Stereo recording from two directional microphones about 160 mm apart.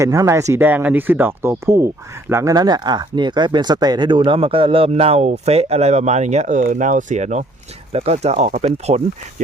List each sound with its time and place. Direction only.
0.0 s speech: 20° right (ahead or behind); by 9.0 s 45° right (ahead or behind)